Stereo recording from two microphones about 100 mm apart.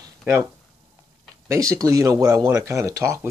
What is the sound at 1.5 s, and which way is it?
Speech, 35° right (ahead or behind).